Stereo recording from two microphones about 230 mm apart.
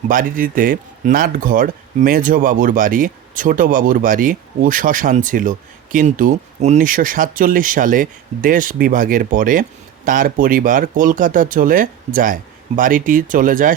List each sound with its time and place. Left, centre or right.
0.1 s speech: right